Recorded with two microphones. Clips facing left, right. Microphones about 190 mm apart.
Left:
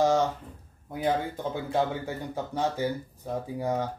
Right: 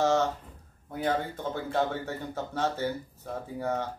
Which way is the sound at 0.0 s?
15° left (ahead or behind).